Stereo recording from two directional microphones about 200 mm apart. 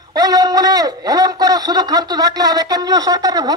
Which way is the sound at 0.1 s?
20° right (ahead or behind).